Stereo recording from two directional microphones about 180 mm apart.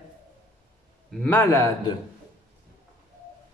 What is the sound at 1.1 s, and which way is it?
Speech, 10° left (ahead or behind).